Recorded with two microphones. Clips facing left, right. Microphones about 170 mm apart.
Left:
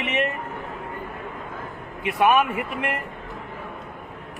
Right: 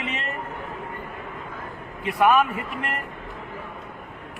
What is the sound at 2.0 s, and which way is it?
Speech, 20° left (ahead or behind).